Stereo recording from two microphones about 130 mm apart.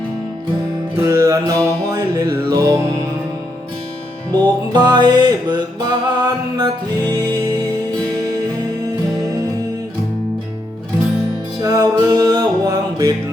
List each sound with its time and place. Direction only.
0.9 s music: 25° right (ahead or behind)
4.3 s music: 30° right (ahead or behind)
11.6 s music: 30° right (ahead or behind)